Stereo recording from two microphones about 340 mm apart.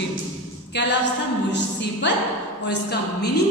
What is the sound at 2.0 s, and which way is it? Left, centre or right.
Speech, left.